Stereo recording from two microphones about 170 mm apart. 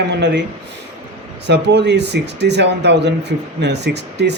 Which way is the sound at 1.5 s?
85° right.